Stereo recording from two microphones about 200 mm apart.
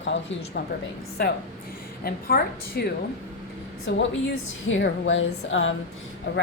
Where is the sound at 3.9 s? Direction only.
65° left (ahead or behind).